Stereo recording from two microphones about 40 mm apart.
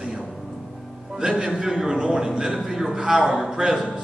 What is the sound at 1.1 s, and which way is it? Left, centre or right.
A man's voice, centre.